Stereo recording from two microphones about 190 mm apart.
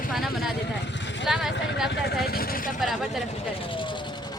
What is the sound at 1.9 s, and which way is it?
Speech, 60° left (ahead or behind).